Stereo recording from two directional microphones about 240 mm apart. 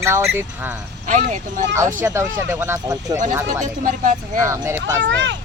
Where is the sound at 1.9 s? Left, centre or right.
Centre.